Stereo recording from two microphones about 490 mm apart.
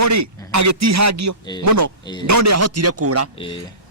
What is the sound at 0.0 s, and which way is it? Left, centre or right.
A man's voice, right.